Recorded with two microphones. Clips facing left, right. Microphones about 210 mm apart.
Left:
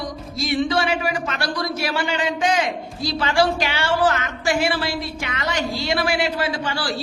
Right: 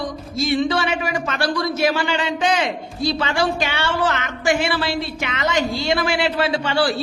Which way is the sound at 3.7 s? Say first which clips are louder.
Left 2 dB; 25° right (ahead or behind).